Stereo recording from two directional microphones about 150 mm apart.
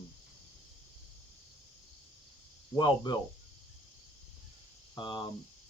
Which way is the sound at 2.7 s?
30° left (ahead or behind).